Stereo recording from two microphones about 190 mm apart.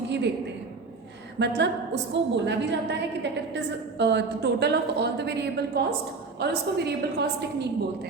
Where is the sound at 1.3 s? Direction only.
65° right (ahead or behind).